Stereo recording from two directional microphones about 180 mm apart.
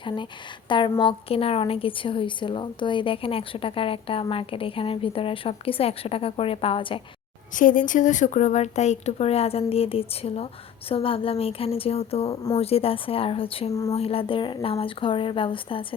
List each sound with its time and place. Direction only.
0.7 s a woman's voice: 25° left (ahead or behind)
7.5 s a woman's voice: 50° left (ahead or behind)
12.3 s speech: 20° left (ahead or behind)
12.5 s a woman's voice: 35° left (ahead or behind)